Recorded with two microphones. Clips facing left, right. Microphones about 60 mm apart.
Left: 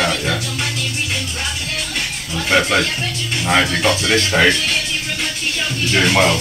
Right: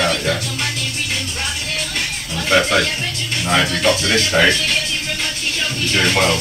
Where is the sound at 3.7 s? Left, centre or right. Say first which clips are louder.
Even; left.